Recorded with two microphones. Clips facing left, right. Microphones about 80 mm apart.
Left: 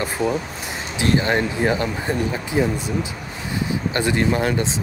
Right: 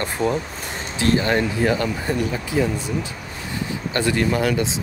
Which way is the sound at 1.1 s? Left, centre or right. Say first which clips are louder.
Left 1 dB; left.